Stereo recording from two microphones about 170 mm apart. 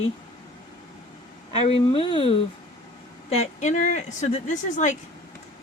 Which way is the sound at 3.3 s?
40° left (ahead or behind).